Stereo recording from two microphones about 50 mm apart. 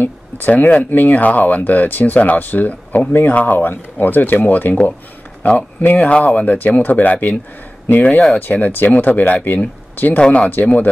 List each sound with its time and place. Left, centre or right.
0.0 s speech: left
8.4 s speech: left
10.1 s speech: left